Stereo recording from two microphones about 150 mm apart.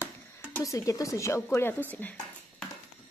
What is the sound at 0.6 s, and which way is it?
Speech, 20° left (ahead or behind).